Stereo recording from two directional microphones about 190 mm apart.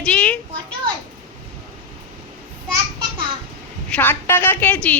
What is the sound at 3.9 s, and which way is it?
A woman's voice, 10° left (ahead or behind).